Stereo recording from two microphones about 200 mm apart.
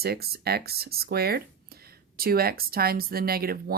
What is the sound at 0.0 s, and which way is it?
Speech, 50° right (ahead or behind).